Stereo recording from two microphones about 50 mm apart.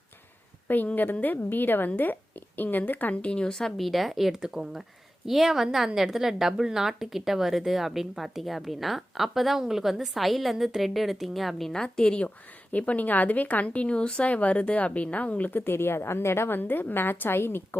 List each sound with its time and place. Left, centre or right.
0.7 s speech: left
3.2 s speech: left
3.8 s a woman's voice: centre
4.8 s a woman's voice: centre
11.8 s speech: centre
12.7 s speech: left